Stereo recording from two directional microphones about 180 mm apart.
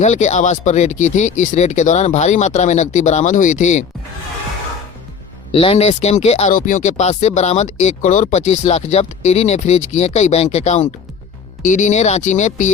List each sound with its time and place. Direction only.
0.0 s speech: 40° left (ahead or behind)
5.5 s speech: 30° left (ahead or behind)